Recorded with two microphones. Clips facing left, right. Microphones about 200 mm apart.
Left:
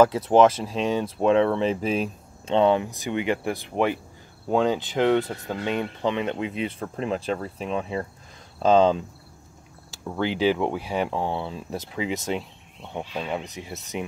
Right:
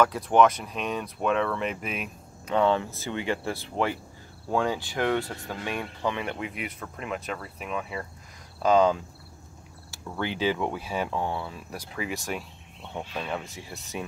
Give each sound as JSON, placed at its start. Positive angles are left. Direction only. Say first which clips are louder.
{"t": 0.0, "sound": "speech", "louder": "left 4 dB", "side_deg": 25}